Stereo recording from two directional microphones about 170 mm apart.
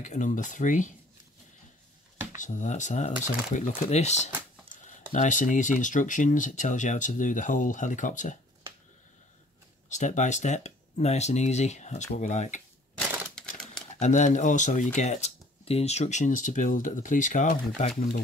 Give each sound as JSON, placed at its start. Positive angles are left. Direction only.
{"t": 0.0, "sound": "speech", "side_deg": 45}
{"t": 2.3, "sound": "speech", "side_deg": 45}
{"t": 9.8, "sound": "speech", "side_deg": 45}
{"t": 13.3, "sound": "typewriter", "side_deg": 5}
{"t": 13.9, "sound": "speech", "side_deg": 45}